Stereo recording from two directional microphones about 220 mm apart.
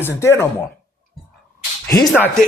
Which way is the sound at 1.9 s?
10° left (ahead or behind).